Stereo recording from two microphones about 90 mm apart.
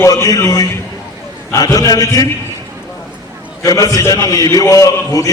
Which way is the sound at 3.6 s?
40° left (ahead or behind).